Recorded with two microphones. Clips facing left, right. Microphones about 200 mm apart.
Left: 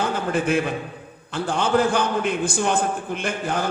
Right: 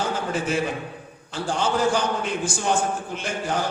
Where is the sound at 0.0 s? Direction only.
55° left (ahead or behind).